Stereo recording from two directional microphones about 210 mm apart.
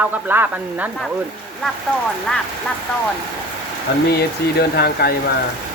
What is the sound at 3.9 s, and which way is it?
Speech, 50° left (ahead or behind).